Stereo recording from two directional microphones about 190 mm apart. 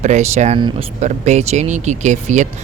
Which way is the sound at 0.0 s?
35° right (ahead or behind).